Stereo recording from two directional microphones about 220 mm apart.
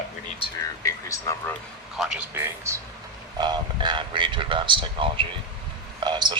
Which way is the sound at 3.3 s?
20° right (ahead or behind).